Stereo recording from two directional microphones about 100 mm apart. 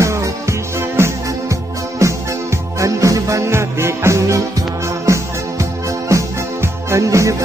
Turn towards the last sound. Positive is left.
turn(degrees=-30)  # may be behind; listen again after turning